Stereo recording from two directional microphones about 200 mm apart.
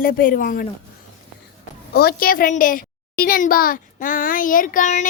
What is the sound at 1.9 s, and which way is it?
A child's voice, 50° left (ahead or behind).